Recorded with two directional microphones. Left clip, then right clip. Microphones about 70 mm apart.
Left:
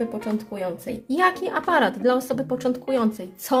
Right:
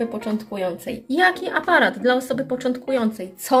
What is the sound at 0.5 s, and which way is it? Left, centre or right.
Speech, left.